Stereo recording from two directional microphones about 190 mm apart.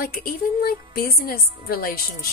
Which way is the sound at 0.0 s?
50° left (ahead or behind).